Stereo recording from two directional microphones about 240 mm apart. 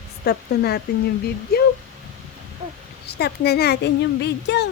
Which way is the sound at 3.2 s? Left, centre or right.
Left.